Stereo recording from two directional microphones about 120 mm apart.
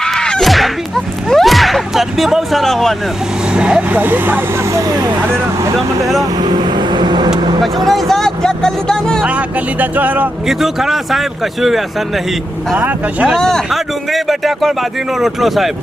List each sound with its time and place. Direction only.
0.0 s a sound: 5° left (ahead or behind)
3.5 s speech: 10° right (ahead or behind); by 5.1 s 30° right (ahead or behind)
6.3 s vehicle: 35° right (ahead or behind)
7.9 s speech: centre (ahead or behind)
9.2 s speech: 10° right (ahead or behind)
10.4 s speech: 5° right (ahead or behind)
12.7 s speech: 15° right (ahead or behind)
13.3 s speech: 5° left (ahead or behind)